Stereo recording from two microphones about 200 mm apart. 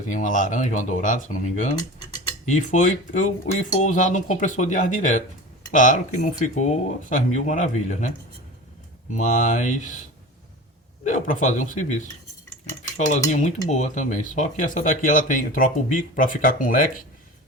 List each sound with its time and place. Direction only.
0.1 s speech: 40° left (ahead or behind)
9.1 s speech: 40° left (ahead or behind)
11.0 s speech: 40° left (ahead or behind)
13.1 s speech: 35° left (ahead or behind)